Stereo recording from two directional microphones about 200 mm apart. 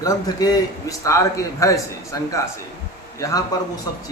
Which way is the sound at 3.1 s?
15° left (ahead or behind).